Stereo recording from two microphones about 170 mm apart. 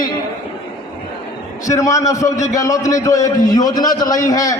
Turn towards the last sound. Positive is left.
turn(degrees=20)  # may be behind; listen again after turning